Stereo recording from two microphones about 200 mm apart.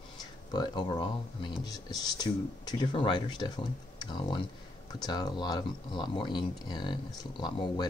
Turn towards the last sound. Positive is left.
turn(degrees=20)  # may be behind; listen again after turning